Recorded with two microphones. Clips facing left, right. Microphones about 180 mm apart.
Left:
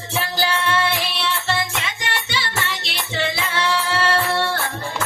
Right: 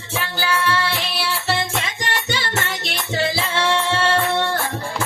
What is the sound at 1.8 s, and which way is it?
Music, 40° right (ahead or behind).